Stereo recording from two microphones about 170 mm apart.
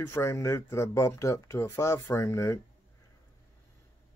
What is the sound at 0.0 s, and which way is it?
Speech, 15° left (ahead or behind).